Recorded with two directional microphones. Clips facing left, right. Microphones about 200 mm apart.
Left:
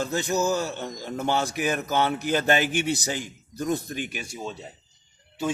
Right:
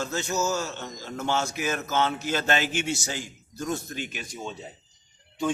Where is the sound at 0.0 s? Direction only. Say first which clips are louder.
Left 3 dB; 15° left (ahead or behind).